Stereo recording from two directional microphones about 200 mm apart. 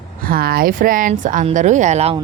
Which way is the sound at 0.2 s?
50° right (ahead or behind).